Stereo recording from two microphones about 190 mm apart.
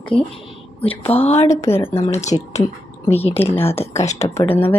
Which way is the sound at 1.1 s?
30° left (ahead or behind).